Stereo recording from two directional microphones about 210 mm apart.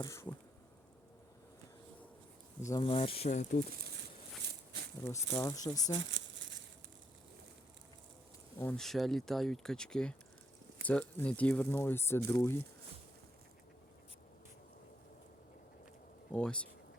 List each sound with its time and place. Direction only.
0.0 s speech: 15° left (ahead or behind)
2.6 s speech: 15° left (ahead or behind)
2.8 s speech: 25° left (ahead or behind)
4.4 s a sound: 50° right (ahead or behind)
5.0 s speech: 15° left (ahead or behind)
5.9 s crumpling: 60° right (ahead or behind)
8.5 s speech: 5° left (ahead or behind)
16.3 s speech: 5° left (ahead or behind)